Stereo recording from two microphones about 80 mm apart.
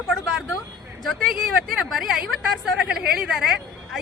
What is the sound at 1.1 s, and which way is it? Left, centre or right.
Speech, centre.